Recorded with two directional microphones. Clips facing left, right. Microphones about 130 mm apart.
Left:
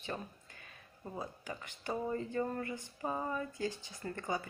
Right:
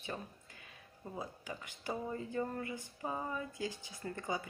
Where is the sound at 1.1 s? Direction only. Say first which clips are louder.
Left 1 dB; 10° right (ahead or behind).